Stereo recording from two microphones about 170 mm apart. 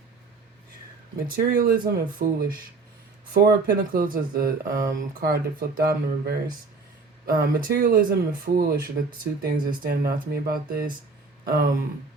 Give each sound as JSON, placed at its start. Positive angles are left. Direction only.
{"t": 1.3, "sound": "speech", "side_deg": -60}